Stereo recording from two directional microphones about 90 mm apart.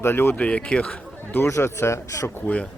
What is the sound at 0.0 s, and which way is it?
Speech, 25° left (ahead or behind).